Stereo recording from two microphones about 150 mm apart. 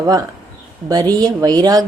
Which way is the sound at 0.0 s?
25° right (ahead or behind).